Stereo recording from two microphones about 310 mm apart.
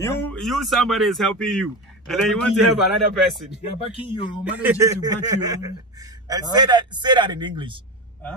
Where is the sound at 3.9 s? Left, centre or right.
Centre.